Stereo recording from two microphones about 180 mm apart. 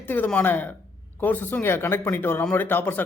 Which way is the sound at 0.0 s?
10° left (ahead or behind).